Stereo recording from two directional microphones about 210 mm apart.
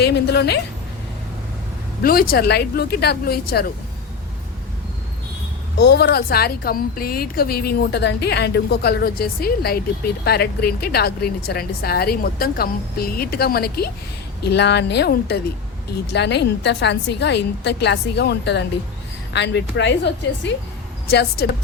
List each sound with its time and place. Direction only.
0.0 s a woman's voice: 50° left (ahead or behind)
2.0 s a woman's voice: 45° left (ahead or behind)
5.7 s a woman's voice: 55° left (ahead or behind)
21.1 s a woman's voice: 50° left (ahead or behind)